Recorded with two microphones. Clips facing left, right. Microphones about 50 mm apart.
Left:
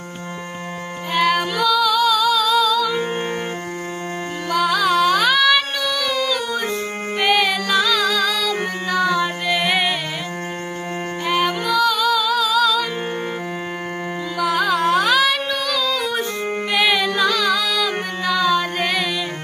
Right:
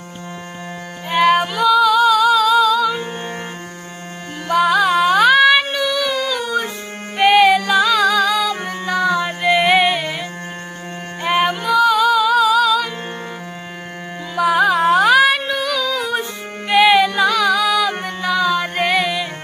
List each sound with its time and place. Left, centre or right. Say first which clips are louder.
1.1 s female singing: right 4 dB; centre
4.4 s music: right 4 dB; centre
11.3 s music: right 3 dB; right
14.3 s music: right 5 dB; centre